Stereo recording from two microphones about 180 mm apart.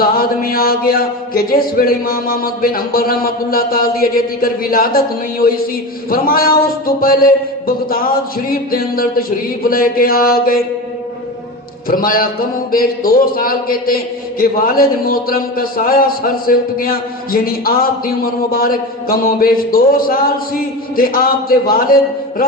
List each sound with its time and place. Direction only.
0.0 s a man's voice: 55° left (ahead or behind)
8.4 s a man's voice: 55° left (ahead or behind)
11.9 s a man's voice: 55° left (ahead or behind)